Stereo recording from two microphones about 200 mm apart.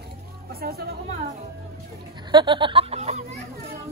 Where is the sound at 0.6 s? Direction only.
50° right (ahead or behind).